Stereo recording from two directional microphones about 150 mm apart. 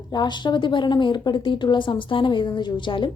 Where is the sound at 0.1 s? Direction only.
30° left (ahead or behind).